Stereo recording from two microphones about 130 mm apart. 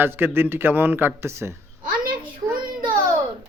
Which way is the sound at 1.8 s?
90° right.